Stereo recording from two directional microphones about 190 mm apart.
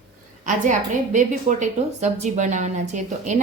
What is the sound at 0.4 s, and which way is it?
A woman's voice, 40° right (ahead or behind).